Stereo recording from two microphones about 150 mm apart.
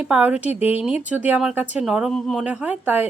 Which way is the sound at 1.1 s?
10° right (ahead or behind).